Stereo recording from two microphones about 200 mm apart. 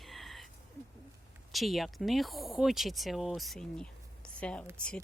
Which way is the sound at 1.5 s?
Centre (ahead or behind).